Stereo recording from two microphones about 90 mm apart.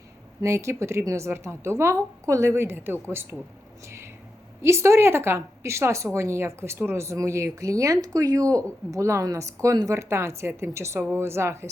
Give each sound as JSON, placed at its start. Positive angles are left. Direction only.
{"t": 0.4, "sound": "speech", "side_deg": -30}
{"t": 3.8, "sound": "a sound", "side_deg": -30}
{"t": 4.6, "sound": "a woman's voice", "side_deg": -30}